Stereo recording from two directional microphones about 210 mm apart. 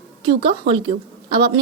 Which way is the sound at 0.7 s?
60° right (ahead or behind).